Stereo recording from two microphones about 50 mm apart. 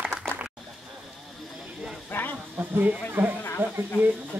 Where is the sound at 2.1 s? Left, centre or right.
Left.